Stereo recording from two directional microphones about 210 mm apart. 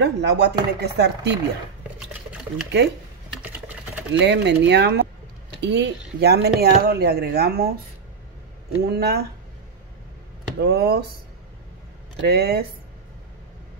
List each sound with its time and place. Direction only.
0.0 s speech: 55° right (ahead or behind)
2.5 s speech: 55° right (ahead or behind)
3.4 s a sound: 5° right (ahead or behind)
4.1 s speech: 55° right (ahead or behind)
8.8 s speech: 50° right (ahead or behind)
10.6 s speech: 50° right (ahead or behind)
12.2 s speech: 50° right (ahead or behind)